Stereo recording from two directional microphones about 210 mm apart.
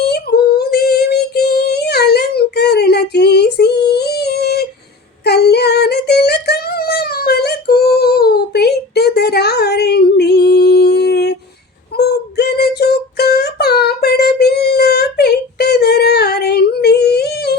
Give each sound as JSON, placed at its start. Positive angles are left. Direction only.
{"t": 0.1, "sound": "female singing", "side_deg": 50}
{"t": 11.9, "sound": "child singing", "side_deg": 50}